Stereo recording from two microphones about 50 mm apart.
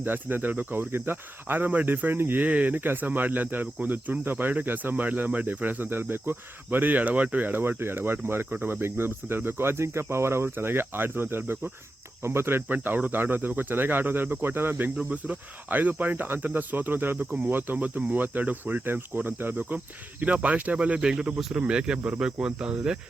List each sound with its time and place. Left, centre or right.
0.0 s speech: right
2.4 s speech: right
12.6 s speech: right
15.1 s speech: right
17.7 s speech: right
21.9 s speech: right
22.2 s speech: right